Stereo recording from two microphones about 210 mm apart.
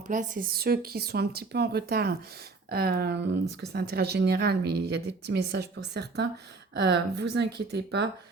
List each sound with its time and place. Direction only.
0.1 s a woman's voice: 40° right (ahead or behind); by 8.1 s 55° right (ahead or behind)